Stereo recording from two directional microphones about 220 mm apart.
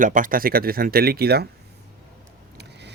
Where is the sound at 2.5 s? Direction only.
50° right (ahead or behind).